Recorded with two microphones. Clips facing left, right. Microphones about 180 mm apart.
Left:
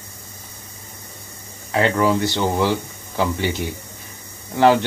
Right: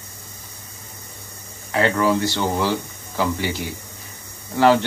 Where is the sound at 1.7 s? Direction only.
20° left (ahead or behind).